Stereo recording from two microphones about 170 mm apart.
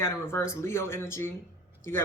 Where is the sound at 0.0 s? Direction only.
15° left (ahead or behind).